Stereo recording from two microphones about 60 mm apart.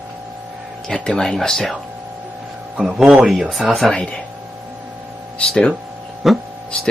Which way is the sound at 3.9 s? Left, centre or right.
Centre.